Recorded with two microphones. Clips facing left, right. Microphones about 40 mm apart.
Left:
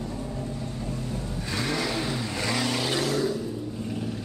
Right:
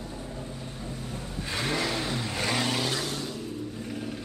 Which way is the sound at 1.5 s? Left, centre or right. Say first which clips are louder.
Left 1 dB; centre.